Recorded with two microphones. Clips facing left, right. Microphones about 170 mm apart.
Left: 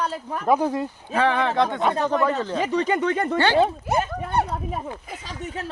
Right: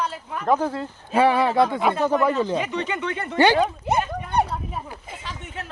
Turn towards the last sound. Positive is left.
turn(degrees=40)  # may be behind; listen again after turning